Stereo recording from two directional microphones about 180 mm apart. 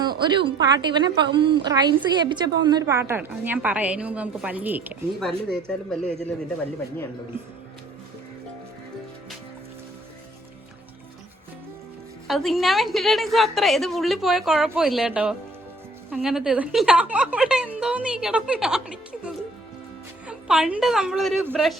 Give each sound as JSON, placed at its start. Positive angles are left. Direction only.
{"t": 0.0, "sound": "a woman's voice", "side_deg": -25}
{"t": 5.2, "sound": "a woman's voice", "side_deg": 5}
{"t": 12.3, "sound": "a woman's voice", "side_deg": 0}